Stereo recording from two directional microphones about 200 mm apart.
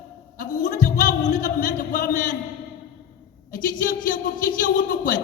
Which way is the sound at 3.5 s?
40° left (ahead or behind).